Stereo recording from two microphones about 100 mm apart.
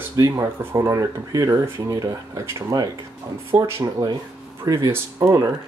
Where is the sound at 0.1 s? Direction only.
30° right (ahead or behind).